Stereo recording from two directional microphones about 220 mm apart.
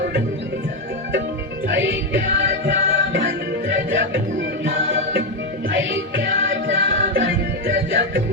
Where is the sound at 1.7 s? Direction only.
55° right (ahead or behind).